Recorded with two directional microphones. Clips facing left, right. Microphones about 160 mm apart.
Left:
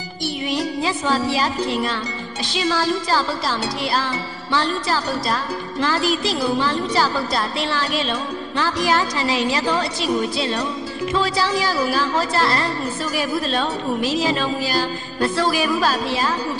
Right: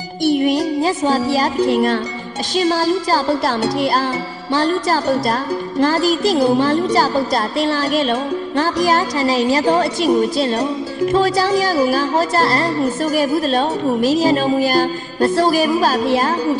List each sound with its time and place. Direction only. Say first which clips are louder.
0.2 s music: right 9 dB; 50° right (ahead or behind)